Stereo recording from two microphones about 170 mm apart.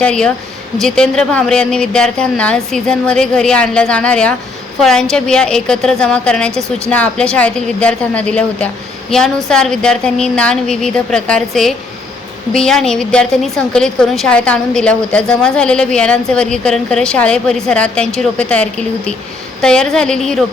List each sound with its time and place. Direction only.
0.0 s a woman's voice: 5° left (ahead or behind)
6.5 s a woman's voice: 15° right (ahead or behind)
6.9 s a woman's voice: 5° left (ahead or behind)